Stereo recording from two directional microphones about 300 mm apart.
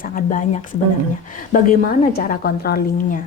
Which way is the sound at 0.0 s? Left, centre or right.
Left.